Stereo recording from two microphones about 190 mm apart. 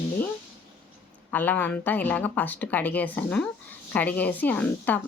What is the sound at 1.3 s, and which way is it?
Speech, 10° left (ahead or behind).